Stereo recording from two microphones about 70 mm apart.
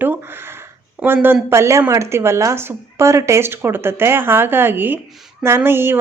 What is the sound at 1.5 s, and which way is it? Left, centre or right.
Speech, right.